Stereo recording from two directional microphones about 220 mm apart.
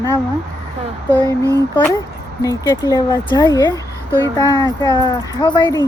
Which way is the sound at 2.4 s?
15° left (ahead or behind).